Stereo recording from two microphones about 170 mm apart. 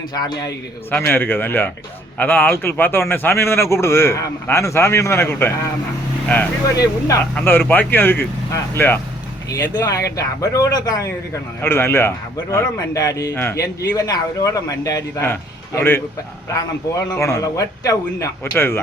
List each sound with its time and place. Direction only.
0.1 s a man's voice: 25° left (ahead or behind)
0.9 s a man's voice: 10° left (ahead or behind)